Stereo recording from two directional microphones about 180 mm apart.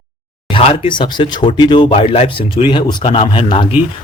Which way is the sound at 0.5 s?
30° left (ahead or behind).